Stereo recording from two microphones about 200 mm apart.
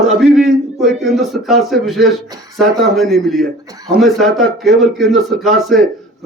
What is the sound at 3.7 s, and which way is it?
Speech, 20° right (ahead or behind).